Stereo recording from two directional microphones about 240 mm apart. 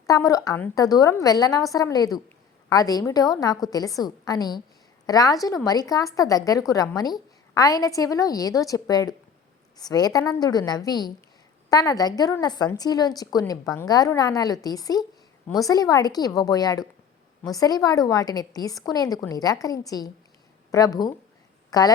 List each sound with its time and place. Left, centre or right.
0.0 s a woman's voice: centre